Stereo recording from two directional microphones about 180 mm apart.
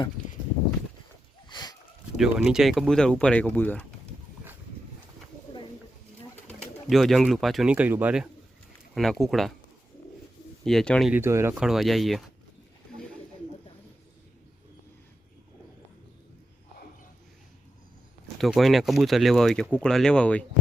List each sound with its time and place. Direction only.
1.5 s a sound: 25° left (ahead or behind)
2.1 s speech: centre (ahead or behind)
6.5 s speech: 5° left (ahead or behind)
10.6 s speech: 5° left (ahead or behind)
11.1 s speech: 15° right (ahead or behind)
11.6 s speech: centre (ahead or behind)
18.3 s speech: centre (ahead or behind)